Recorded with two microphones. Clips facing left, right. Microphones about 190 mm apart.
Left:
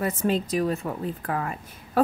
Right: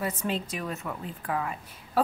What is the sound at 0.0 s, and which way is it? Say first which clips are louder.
Speech: left 6 dB; 40° left (ahead or behind).